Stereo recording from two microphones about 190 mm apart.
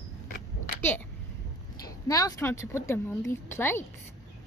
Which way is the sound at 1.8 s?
20° left (ahead or behind).